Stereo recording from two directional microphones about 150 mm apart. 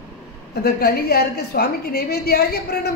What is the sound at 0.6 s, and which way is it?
A woman's voice, 90° left.